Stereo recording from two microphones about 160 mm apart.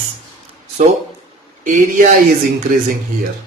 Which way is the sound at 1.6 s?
55° right (ahead or behind).